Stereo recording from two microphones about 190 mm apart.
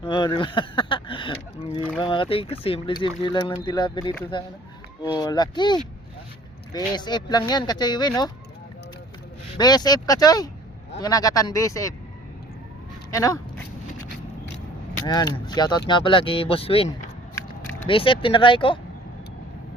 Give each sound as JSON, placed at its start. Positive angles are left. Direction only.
{"t": 0.0, "sound": "a sound", "side_deg": 25}
{"t": 2.0, "sound": "speech", "side_deg": 25}
{"t": 9.6, "sound": "speech", "side_deg": 20}
{"t": 13.1, "sound": "speech", "side_deg": 15}
{"t": 15.0, "sound": "speech", "side_deg": 20}